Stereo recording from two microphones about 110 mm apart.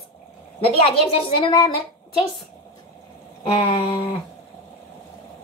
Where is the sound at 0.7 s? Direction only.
60° left (ahead or behind).